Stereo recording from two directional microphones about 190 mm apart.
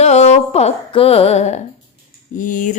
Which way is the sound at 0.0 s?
35° left (ahead or behind).